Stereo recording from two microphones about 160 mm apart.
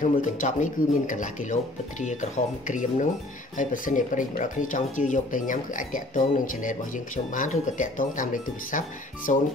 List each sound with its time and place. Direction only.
0.0 s speech: 50° left (ahead or behind)